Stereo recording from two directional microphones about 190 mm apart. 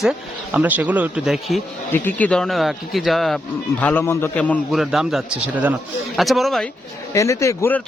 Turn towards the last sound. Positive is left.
turn(degrees=10)  # may be behind; listen again after turning